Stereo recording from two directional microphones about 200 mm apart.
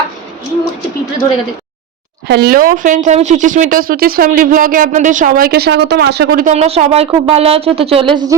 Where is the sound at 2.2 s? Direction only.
55° right (ahead or behind).